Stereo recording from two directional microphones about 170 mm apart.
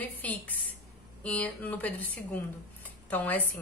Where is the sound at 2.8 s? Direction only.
10° left (ahead or behind).